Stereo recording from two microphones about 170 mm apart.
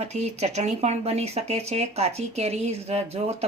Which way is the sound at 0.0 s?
40° right (ahead or behind).